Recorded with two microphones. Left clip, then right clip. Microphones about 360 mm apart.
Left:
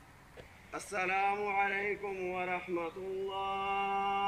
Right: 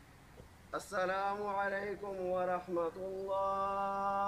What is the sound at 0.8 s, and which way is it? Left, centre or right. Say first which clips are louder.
Music: left 3 dB; centre.